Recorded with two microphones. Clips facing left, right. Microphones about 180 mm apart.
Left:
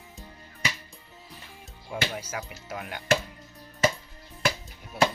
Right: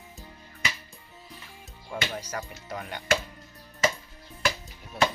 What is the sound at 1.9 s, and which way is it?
Speech, 10° left (ahead or behind).